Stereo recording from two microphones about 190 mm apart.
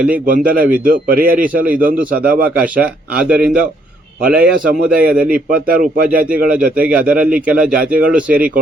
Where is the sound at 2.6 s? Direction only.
10° right (ahead or behind).